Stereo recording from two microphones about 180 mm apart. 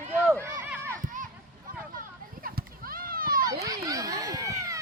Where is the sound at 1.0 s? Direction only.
45° right (ahead or behind).